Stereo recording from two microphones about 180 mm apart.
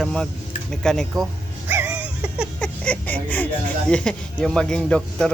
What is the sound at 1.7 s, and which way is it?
Music, 10° right (ahead or behind).